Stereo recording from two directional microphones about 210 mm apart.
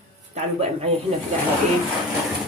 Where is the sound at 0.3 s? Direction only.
30° right (ahead or behind).